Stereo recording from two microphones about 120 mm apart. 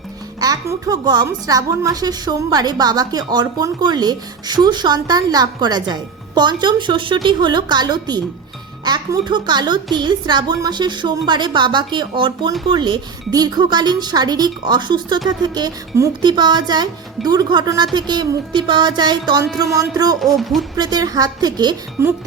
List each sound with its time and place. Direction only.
0.3 s a woman's voice: 30° right (ahead or behind)
20.1 s music: centre (ahead or behind)
20.7 s a woman's voice: 35° right (ahead or behind)